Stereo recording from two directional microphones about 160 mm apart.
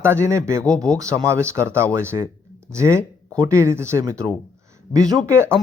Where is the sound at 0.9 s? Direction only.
20° right (ahead or behind).